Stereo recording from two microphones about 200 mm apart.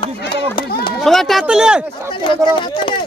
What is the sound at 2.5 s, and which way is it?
Speech, 25° left (ahead or behind).